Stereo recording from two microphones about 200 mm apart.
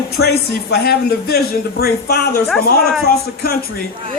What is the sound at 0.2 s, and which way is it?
Speech, 90° left.